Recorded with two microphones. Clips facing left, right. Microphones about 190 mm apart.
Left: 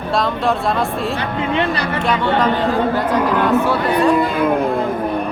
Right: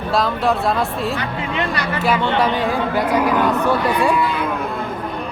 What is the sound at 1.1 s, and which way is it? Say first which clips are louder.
Speech: left 4 dB; 30° left (ahead or behind).